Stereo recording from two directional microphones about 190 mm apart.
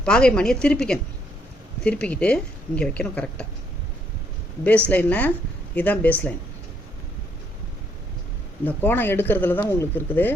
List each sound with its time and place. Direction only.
0.0 s a woman's voice: 5° left (ahead or behind)
4.9 s speech: 10° left (ahead or behind)
8.6 s speech: 10° left (ahead or behind)